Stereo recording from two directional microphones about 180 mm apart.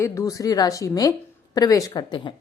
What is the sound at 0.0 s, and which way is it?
A woman's voice, 15° left (ahead or behind).